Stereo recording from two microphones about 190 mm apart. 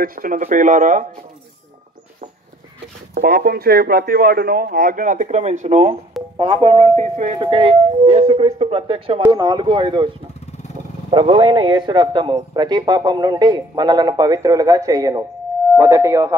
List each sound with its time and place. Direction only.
0.0 s a man's voice: 50° right (ahead or behind)
3.2 s a man's voice: 55° right (ahead or behind); by 10.0 s 25° right (ahead or behind)
11.1 s a man's voice: 25° right (ahead or behind)